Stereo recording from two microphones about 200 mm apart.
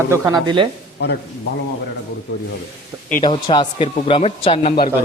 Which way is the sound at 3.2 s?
20° left (ahead or behind).